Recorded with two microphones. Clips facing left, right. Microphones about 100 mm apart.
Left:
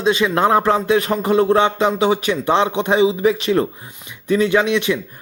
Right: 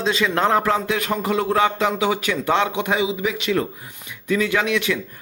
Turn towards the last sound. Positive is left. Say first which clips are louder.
# left 4 dB
turn(degrees=20)  # may be behind; listen again after turning